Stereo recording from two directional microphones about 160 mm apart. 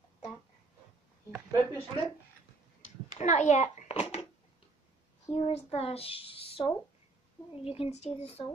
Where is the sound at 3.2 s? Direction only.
45° left (ahead or behind).